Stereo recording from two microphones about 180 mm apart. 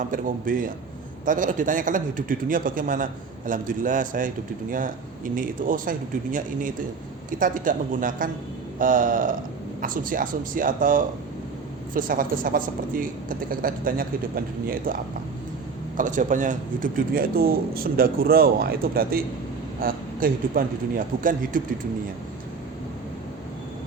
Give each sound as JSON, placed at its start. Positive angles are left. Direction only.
{"t": 0.1, "sound": "a woman's voice", "side_deg": -50}
{"t": 5.3, "sound": "a woman's voice", "side_deg": -50}